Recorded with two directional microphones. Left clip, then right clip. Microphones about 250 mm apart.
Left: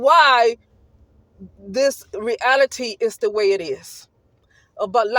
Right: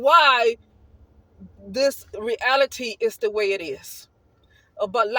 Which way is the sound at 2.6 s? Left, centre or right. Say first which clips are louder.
Left 3 dB; left.